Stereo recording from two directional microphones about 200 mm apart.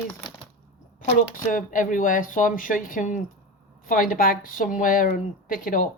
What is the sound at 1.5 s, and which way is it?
A woman's voice, 40° left (ahead or behind).